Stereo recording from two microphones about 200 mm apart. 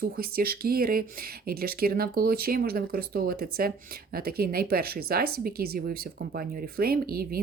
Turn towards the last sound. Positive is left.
turn(degrees=-50)  # may be behind; listen again after turning